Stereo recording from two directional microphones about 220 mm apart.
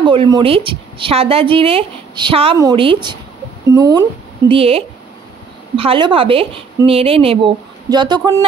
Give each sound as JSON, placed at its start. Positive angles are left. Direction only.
{"t": 0.0, "sound": "a woman's voice", "side_deg": -20}
{"t": 4.5, "sound": "a woman's voice", "side_deg": -25}